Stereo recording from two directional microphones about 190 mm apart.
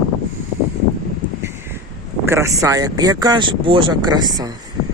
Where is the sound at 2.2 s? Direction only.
15° right (ahead or behind).